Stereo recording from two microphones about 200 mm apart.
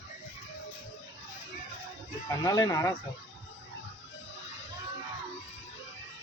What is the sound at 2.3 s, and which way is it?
Speech, 20° left (ahead or behind).